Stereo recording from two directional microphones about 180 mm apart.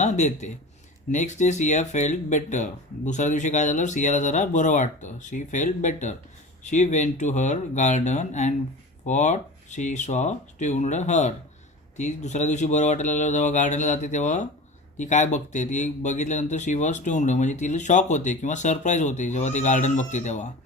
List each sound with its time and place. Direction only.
0.0 s speech: 40° left (ahead or behind)